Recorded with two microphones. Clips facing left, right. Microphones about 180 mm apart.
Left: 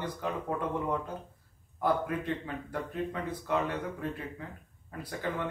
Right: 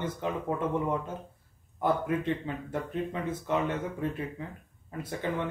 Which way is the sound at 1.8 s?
20° right (ahead or behind).